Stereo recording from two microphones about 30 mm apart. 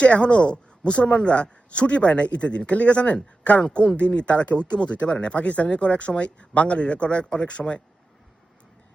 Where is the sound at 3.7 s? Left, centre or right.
Left.